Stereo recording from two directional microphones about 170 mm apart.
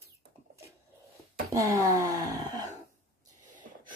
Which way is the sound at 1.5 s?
20° right (ahead or behind).